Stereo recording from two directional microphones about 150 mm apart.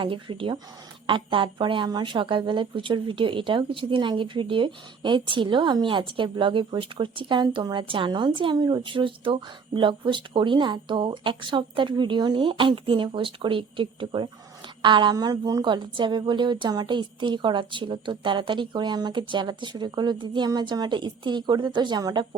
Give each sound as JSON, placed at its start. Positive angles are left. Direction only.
{"t": 0.0, "sound": "speech", "side_deg": -35}